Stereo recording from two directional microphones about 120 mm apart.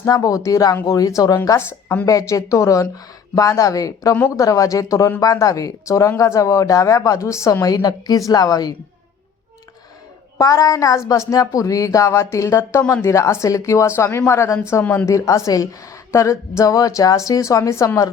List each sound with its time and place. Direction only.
0.1 s a woman's voice: 30° left (ahead or behind)
10.3 s a woman's voice: 30° left (ahead or behind)